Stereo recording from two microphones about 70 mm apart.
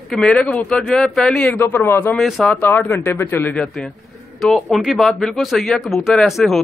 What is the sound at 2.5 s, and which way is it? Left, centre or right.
Speech, left.